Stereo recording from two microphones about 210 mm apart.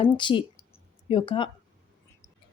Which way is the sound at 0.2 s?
20° left (ahead or behind).